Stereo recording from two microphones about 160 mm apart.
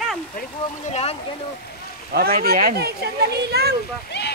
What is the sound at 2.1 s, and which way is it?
Speech, 70° right (ahead or behind).